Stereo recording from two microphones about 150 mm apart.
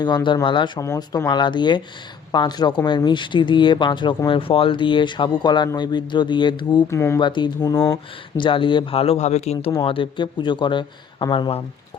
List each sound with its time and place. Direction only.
0.0 s speech: 30° left (ahead or behind)
6.9 s speech: 20° left (ahead or behind)
7.2 s speech: 30° left (ahead or behind)
8.4 s speech: 35° left (ahead or behind)